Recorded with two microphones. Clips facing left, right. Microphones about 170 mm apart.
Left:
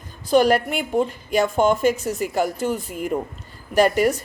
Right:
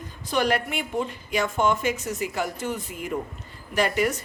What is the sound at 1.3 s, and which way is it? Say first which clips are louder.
A woman's voice: left 5 dB; 35° left (ahead or behind).